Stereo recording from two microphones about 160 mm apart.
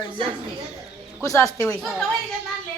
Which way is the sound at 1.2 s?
20° left (ahead or behind).